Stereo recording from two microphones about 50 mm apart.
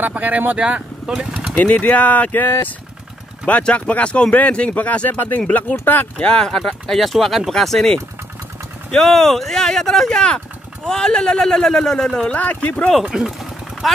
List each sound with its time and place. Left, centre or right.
0.0 s speech: right
1.0 s speech: centre
1.6 s speech: left
2.4 s speech: left
3.6 s speech: left
6.1 s speech: left
6.4 s speech: centre
12.3 s speech: left
13.1 s vehicle: centre